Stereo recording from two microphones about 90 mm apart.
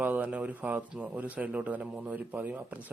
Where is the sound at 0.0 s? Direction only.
15° right (ahead or behind).